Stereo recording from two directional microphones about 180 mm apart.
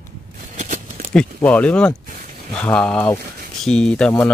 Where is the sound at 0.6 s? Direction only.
45° right (ahead or behind).